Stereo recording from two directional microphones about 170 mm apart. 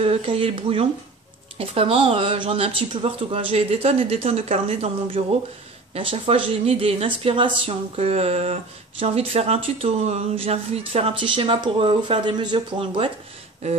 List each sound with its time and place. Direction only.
0.0 s speech: 35° right (ahead or behind)